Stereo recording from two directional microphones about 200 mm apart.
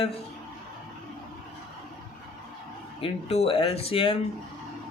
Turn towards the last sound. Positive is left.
turn(degrees=30)  # may be behind; listen again after turning